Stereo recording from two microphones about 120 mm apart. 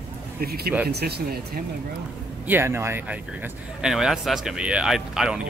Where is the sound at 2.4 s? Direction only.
20° right (ahead or behind).